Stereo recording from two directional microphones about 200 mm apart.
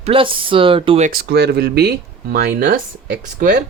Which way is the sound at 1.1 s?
50° right (ahead or behind).